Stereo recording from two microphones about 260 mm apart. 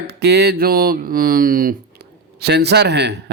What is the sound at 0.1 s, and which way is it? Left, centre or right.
Speech, right.